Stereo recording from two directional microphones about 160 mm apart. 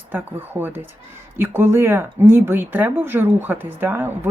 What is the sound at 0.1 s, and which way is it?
Speech, 10° right (ahead or behind).